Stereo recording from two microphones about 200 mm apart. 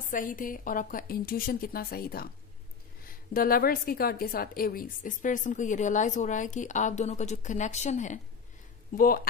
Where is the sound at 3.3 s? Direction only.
45° left (ahead or behind).